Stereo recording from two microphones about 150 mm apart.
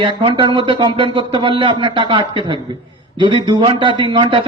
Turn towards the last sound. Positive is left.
turn(degrees=-30)  # may be behind; listen again after turning